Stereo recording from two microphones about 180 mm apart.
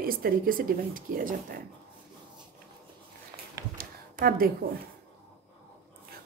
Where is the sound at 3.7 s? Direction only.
55° right (ahead or behind).